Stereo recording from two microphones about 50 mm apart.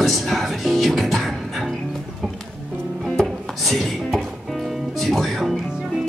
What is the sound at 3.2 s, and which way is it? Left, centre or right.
Music, centre.